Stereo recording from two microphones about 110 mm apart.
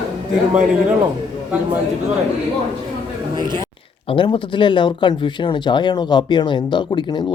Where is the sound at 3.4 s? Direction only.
40° right (ahead or behind).